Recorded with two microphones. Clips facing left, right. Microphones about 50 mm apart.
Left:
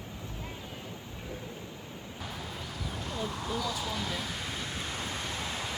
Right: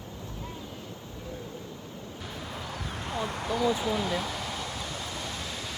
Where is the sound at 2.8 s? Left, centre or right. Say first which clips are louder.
Right 2 dB; right.